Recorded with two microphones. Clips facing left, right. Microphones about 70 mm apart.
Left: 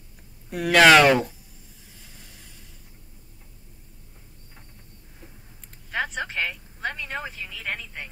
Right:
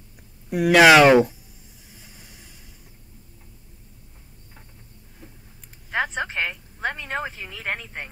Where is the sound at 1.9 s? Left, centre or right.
Centre.